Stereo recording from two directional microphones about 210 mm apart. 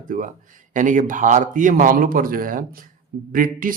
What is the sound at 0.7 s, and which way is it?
Speech, 40° right (ahead or behind).